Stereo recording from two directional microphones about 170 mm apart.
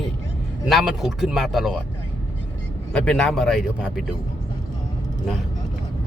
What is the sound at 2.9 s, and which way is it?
Speech, 5° left (ahead or behind).